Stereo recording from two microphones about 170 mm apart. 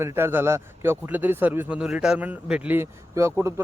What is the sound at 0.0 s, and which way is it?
A man's voice, 15° right (ahead or behind).